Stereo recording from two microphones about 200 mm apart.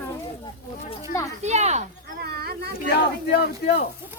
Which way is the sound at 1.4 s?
35° right (ahead or behind).